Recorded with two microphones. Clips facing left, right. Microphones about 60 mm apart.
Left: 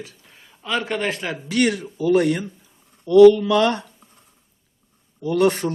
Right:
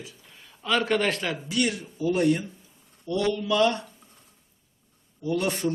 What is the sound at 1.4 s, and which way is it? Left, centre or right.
Speech, left.